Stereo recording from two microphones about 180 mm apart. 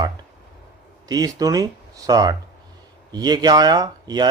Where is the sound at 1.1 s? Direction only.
20° right (ahead or behind).